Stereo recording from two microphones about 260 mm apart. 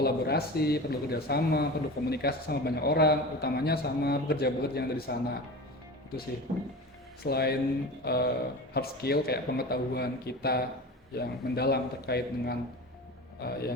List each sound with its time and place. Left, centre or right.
0.0 s a man's voice: left
7.3 s a man's voice: left